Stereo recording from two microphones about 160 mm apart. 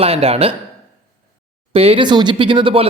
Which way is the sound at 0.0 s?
40° right (ahead or behind).